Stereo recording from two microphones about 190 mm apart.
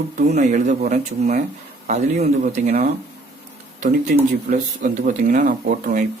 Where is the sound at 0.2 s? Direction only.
40° right (ahead or behind).